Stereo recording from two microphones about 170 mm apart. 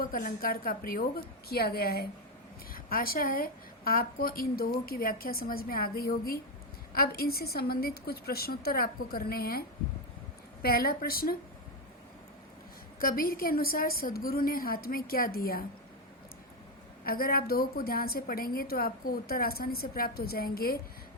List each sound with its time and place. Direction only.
0.0 s a woman's voice: 55° left (ahead or behind)
13.0 s a woman's voice: 60° left (ahead or behind)
17.1 s a woman's voice: 60° left (ahead or behind)